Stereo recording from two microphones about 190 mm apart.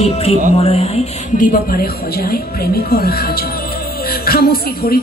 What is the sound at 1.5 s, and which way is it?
Speech, 50° left (ahead or behind).